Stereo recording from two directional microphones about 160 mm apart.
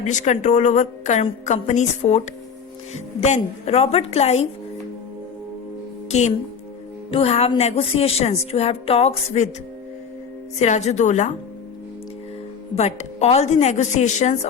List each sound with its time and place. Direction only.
0.0 s a woman's voice: 50° left (ahead or behind)
6.1 s a woman's voice: 45° left (ahead or behind)
10.6 s a woman's voice: 45° left (ahead or behind)
12.7 s a woman's voice: 45° left (ahead or behind)